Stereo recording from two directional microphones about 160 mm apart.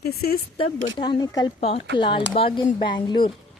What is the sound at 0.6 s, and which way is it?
Speech, 30° left (ahead or behind).